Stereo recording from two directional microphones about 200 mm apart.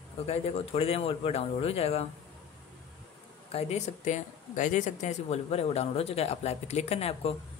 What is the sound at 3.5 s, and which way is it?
Speech, 30° left (ahead or behind).